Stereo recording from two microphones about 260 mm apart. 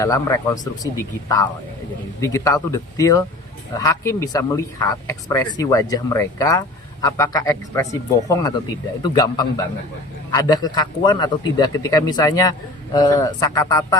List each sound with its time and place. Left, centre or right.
0.0 s speech: centre
2.2 s speech: centre